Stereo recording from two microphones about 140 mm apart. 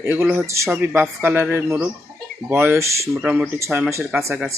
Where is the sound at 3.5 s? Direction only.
20° right (ahead or behind).